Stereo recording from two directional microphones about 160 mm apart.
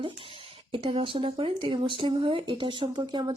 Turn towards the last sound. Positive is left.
turn(degrees=-30)  # may be behind; listen again after turning